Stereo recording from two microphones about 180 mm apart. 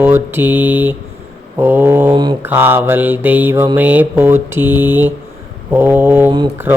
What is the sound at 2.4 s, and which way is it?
Mantra, 10° right (ahead or behind).